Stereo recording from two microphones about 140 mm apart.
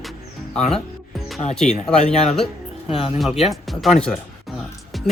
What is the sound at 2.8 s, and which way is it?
Speech, 45° left (ahead or behind).